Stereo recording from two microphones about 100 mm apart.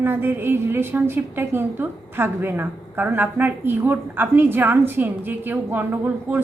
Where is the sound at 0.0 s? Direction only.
25° right (ahead or behind).